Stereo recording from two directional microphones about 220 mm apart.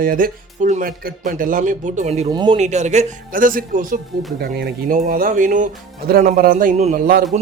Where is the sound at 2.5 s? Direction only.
30° right (ahead or behind).